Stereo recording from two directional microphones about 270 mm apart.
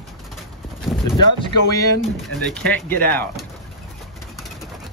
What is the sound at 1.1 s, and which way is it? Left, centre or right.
Speech, centre.